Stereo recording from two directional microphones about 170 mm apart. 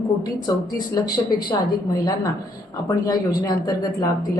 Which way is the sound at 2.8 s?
20° left (ahead or behind).